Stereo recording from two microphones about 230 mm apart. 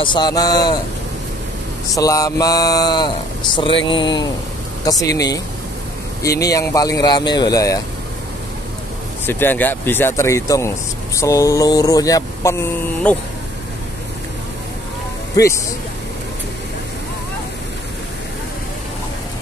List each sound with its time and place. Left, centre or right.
0.0 s mantra: centre
2.0 s mantra: centre
3.5 s speech: left
4.8 s mantra: centre
6.4 s mantra: centre
9.2 s mantra: centre
15.3 s speech: centre